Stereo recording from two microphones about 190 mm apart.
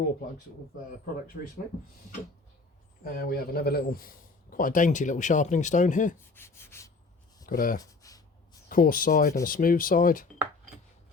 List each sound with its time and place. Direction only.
3.0 s a man's voice: 50° left (ahead or behind)
6.3 s rub: 15° left (ahead or behind)
7.4 s speech: 50° left (ahead or behind)
7.8 s a sound: 20° left (ahead or behind)
8.7 s a man's voice: 50° left (ahead or behind)